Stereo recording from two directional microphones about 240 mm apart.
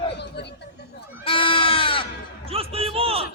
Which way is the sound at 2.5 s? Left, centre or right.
Right.